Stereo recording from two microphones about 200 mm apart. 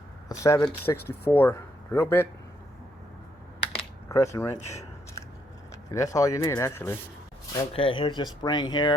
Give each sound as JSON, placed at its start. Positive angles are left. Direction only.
{"t": 0.3, "sound": "speech", "side_deg": 15}
{"t": 3.6, "sound": "typing", "side_deg": 30}
{"t": 4.1, "sound": "speech", "side_deg": 15}
{"t": 5.9, "sound": "speech", "side_deg": 15}
{"t": 7.7, "sound": "speech", "side_deg": 25}